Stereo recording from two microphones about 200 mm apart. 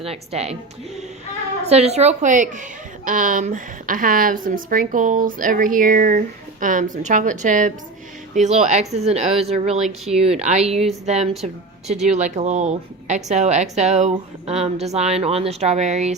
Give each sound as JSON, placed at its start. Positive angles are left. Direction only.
{"t": 0.0, "sound": "a woman's voice", "side_deg": -30}
{"t": 1.6, "sound": "a woman's voice", "side_deg": -30}